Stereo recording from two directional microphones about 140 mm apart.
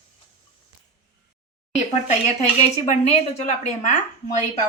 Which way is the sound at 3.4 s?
55° left (ahead or behind).